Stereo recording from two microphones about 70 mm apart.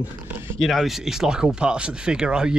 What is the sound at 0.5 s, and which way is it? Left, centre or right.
Speech, centre.